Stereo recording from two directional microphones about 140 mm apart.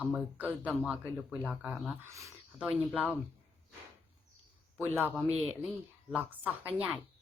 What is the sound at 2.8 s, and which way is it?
Speech, 10° right (ahead or behind).